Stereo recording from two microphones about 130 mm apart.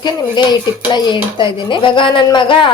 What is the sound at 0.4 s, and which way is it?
Speech, 35° left (ahead or behind).